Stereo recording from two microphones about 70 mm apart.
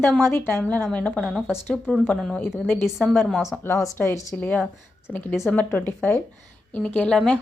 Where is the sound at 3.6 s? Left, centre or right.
Left.